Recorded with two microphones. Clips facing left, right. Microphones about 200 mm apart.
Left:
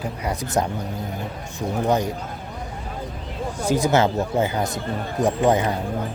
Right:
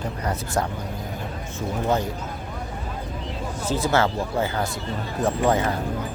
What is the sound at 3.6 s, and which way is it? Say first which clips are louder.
Speech: left 3 dB; 15° left (ahead or behind).